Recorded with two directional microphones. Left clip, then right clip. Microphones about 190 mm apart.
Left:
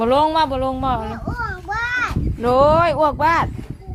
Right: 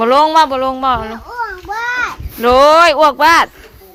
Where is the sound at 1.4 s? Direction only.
35° left (ahead or behind).